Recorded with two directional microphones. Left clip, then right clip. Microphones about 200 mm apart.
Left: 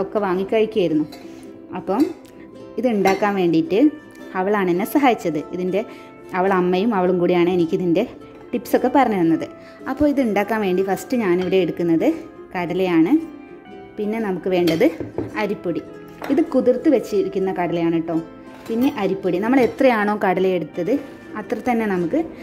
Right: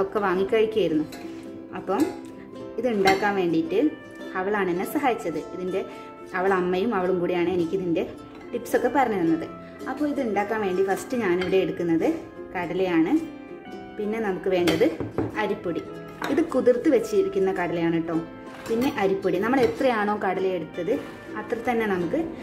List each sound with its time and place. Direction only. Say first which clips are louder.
0.0 s a woman's voice: left 2 dB; 25° left (ahead or behind)
2.7 s a woman's voice: left 3 dB; 35° left (ahead or behind)
16.3 s a woman's voice: left 3 dB; 20° left (ahead or behind)